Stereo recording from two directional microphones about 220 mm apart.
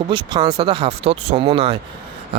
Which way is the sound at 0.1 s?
20° right (ahead or behind).